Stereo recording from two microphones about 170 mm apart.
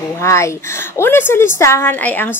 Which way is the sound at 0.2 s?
15° left (ahead or behind).